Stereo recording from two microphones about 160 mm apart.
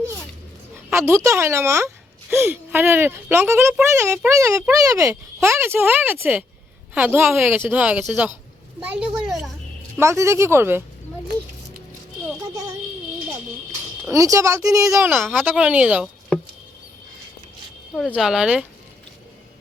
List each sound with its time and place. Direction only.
0.9 s a child's voice: 15° right (ahead or behind)
10.0 s a child's voice: 15° right (ahead or behind)
14.1 s speech: 20° right (ahead or behind)
15.2 s speech: centre (ahead or behind)
17.9 s speech: centre (ahead or behind)